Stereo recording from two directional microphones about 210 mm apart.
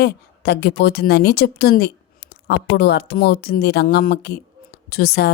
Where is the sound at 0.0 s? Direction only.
50° left (ahead or behind).